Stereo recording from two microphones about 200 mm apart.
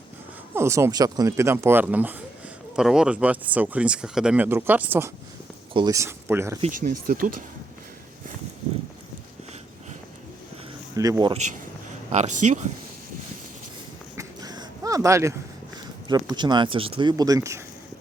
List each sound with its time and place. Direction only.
0.5 s speech: 15° right (ahead or behind)
6.6 s speech: 40° right (ahead or behind)
10.9 s speech: 15° right (ahead or behind)
12.1 s speech: 35° right (ahead or behind)
14.2 s a sound: 20° right (ahead or behind)
16.0 s speech: 20° right (ahead or behind)